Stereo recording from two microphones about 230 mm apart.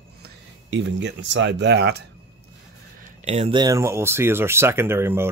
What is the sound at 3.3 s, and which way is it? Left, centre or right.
Speech, right.